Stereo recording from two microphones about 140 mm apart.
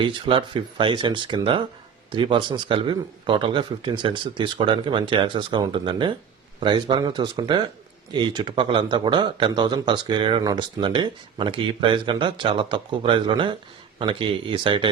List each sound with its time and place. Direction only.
0.0 s a man's voice: 35° right (ahead or behind)